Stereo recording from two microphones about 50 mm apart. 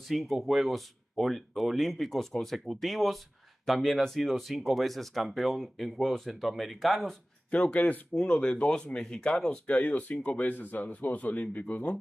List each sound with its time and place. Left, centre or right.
0.0 s speech: centre
7.5 s speech: left
8.1 s speech: centre
9.7 s speech: left